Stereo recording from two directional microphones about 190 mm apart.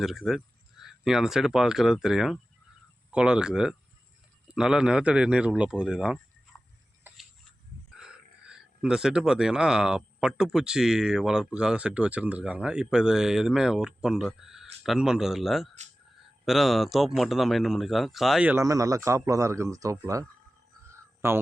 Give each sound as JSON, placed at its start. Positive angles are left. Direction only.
{"t": 0.0, "sound": "speech", "side_deg": 0}
{"t": 7.9, "sound": "speech", "side_deg": -5}
{"t": 20.9, "sound": "a sound", "side_deg": -15}